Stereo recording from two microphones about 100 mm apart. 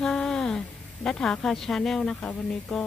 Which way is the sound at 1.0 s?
5° left (ahead or behind).